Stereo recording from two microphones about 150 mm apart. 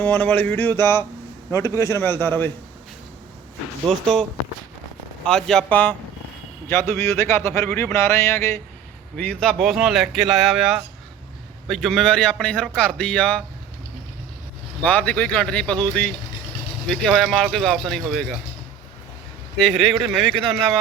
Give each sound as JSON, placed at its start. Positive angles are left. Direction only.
{"t": 0.0, "sound": "speech", "side_deg": 10}
{"t": 3.8, "sound": "speech", "side_deg": 0}
{"t": 9.1, "sound": "speech", "side_deg": 10}
{"t": 14.8, "sound": "speech", "side_deg": 10}
{"t": 19.5, "sound": "speech", "side_deg": 5}